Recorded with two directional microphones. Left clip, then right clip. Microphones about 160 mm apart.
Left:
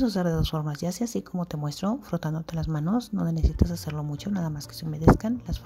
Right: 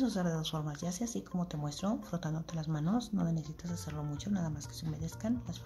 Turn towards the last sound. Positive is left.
turn(degrees=40)  # may be behind; listen again after turning